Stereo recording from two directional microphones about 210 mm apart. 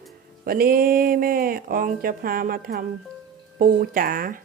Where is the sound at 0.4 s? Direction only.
45° right (ahead or behind).